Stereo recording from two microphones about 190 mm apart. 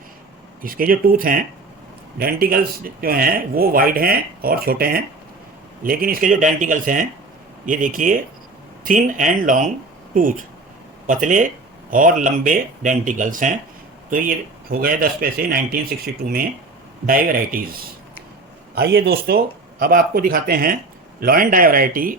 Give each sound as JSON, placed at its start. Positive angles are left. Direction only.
{"t": 0.6, "sound": "speech", "side_deg": -50}
{"t": 17.1, "sound": "speech", "side_deg": -50}